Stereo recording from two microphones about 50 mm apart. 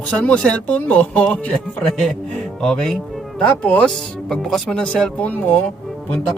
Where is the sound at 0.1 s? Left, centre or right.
Left.